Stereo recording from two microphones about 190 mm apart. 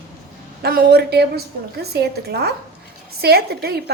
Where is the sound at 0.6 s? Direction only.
55° right (ahead or behind).